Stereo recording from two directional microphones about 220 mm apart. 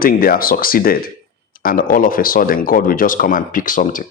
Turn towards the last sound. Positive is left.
turn(degrees=35)  # may be behind; listen again after turning